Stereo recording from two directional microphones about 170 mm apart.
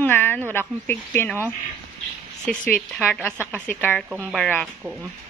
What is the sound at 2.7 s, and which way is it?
Speech, 10° left (ahead or behind).